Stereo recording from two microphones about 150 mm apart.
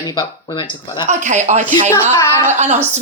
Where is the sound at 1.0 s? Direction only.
55° right (ahead or behind).